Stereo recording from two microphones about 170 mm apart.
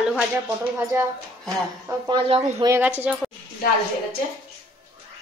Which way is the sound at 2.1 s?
35° right (ahead or behind).